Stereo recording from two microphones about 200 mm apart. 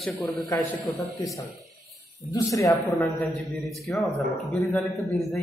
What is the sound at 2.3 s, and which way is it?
Speech, 15° left (ahead or behind).